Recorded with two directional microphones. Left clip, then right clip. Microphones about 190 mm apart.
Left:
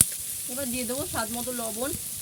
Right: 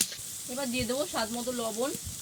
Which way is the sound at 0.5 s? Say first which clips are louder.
Right 1 dB; 15° left (ahead or behind).